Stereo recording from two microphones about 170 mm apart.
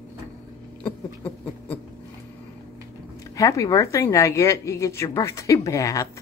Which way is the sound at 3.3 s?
20° left (ahead or behind).